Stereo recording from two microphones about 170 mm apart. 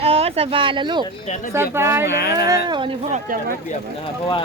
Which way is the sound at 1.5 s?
15° right (ahead or behind).